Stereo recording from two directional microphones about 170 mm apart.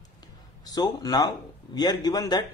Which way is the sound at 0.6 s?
20° left (ahead or behind).